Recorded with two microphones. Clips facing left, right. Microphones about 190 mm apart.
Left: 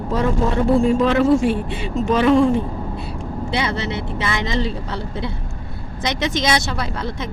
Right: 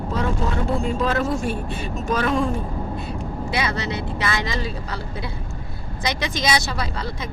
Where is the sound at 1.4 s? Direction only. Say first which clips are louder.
Left 6 dB; 50° right (ahead or behind).